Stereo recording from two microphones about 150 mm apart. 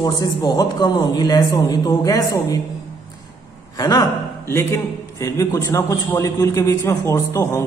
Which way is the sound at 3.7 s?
25° left (ahead or behind).